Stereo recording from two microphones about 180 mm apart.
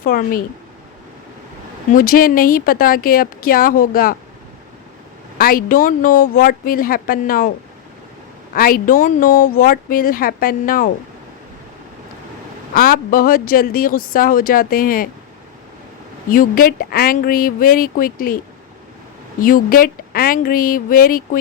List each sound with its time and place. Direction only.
0.0 s speech: 55° left (ahead or behind)
1.9 s speech: 50° left (ahead or behind)
5.4 s speech: 50° left (ahead or behind)
8.5 s speech: 55° left (ahead or behind)
12.7 s speech: 55° left (ahead or behind)
16.3 s speech: 50° left (ahead or behind)
19.4 s speech: 50° left (ahead or behind)